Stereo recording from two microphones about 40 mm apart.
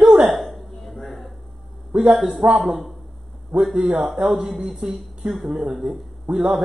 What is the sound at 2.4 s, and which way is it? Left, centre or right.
A woman's voice, right.